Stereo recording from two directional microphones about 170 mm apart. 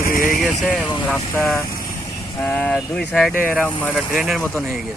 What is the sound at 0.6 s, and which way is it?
Speech, 10° left (ahead or behind).